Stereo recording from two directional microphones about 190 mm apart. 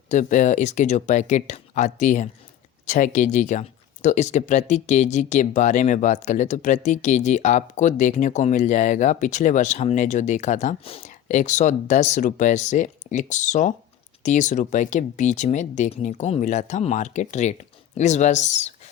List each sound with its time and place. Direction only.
0.1 s speech: 40° left (ahead or behind)